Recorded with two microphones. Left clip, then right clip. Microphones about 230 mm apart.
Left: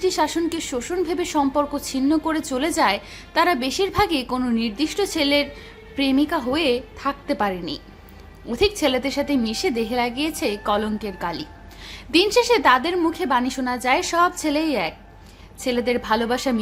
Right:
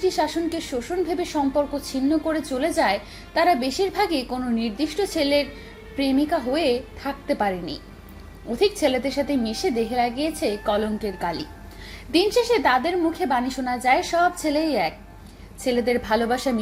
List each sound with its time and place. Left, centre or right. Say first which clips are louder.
0.1 s a woman's voice: left 2 dB; centre